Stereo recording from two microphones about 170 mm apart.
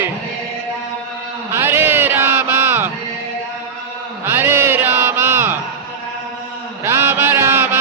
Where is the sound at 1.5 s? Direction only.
15° right (ahead or behind).